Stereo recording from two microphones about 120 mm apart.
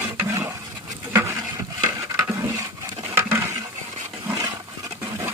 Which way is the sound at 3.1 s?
20° right (ahead or behind).